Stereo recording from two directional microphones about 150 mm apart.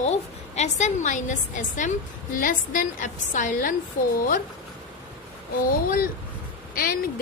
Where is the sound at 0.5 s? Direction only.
50° left (ahead or behind).